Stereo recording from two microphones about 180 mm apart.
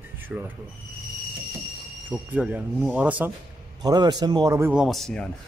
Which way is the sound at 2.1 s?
10° right (ahead or behind).